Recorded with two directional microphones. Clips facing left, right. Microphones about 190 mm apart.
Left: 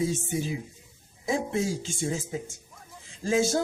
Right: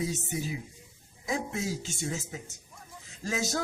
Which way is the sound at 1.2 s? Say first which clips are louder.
Left 5 dB; 30° left (ahead or behind).